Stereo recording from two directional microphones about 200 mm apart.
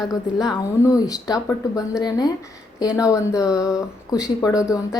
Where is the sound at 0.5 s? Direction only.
15° left (ahead or behind).